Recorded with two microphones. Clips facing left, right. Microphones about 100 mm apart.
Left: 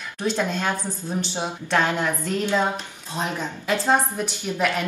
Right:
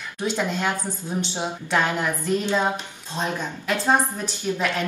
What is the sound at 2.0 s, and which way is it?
Speech, 15° right (ahead or behind).